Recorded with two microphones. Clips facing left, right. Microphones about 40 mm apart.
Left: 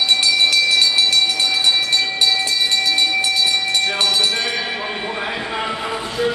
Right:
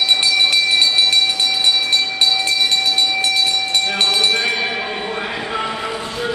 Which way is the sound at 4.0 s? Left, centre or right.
Right.